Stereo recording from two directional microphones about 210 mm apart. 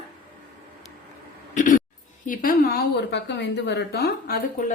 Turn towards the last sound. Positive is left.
turn(degrees=45)  # may be behind; listen again after turning